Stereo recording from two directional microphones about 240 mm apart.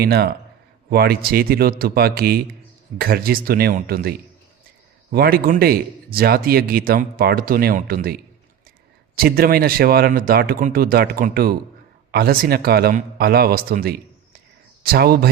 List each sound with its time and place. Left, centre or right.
0.0 s a man's voice: right
5.1 s a man's voice: right